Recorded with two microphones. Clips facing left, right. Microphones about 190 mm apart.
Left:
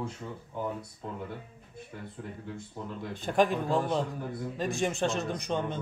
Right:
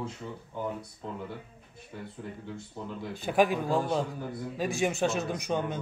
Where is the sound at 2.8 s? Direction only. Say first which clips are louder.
Right 1 dB; 5° left (ahead or behind).